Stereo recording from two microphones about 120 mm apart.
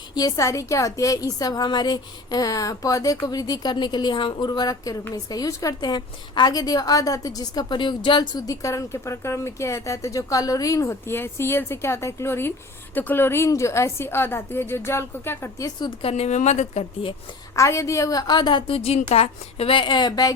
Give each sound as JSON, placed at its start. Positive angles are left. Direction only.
{"t": 0.1, "sound": "speech", "side_deg": 30}
{"t": 16.0, "sound": "a woman's voice", "side_deg": 55}
{"t": 17.5, "sound": "a woman's voice", "side_deg": 25}
{"t": 18.9, "sound": "a woman's voice", "side_deg": 70}